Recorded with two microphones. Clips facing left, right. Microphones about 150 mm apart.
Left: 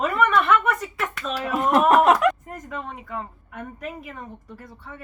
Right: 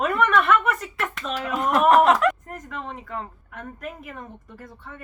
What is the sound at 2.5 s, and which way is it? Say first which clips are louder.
A woman's voice: left 1 dB; centre (ahead or behind).